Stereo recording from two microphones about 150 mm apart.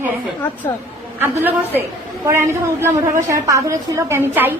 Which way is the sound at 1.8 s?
15° right (ahead or behind).